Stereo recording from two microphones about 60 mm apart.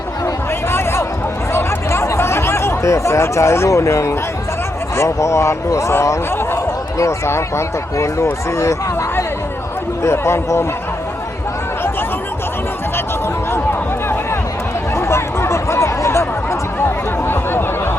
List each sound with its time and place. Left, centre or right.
0.7 s a sound: left
2.0 s speech: left
14.9 s chatter: left